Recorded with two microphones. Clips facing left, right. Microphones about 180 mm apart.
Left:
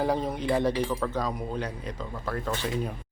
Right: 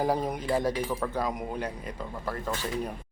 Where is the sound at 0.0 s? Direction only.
10° right (ahead or behind).